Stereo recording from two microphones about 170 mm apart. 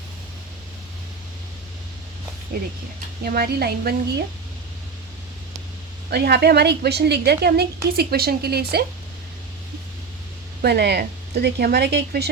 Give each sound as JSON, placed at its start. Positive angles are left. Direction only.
{"t": 3.2, "sound": "a woman's voice", "side_deg": -60}
{"t": 6.1, "sound": "a woman's voice", "side_deg": -75}
{"t": 10.6, "sound": "a woman's voice", "side_deg": -75}